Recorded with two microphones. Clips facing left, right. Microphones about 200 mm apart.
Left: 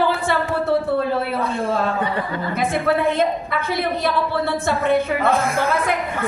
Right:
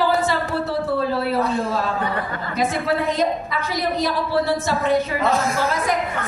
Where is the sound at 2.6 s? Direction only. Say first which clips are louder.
Left 1 dB; 55° left (ahead or behind).